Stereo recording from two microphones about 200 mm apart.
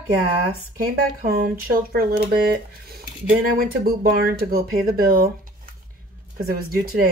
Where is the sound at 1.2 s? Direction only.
50° right (ahead or behind).